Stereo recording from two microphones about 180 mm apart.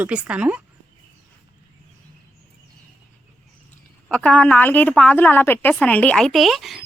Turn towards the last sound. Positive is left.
turn(degrees=0)  # may be behind; listen again after turning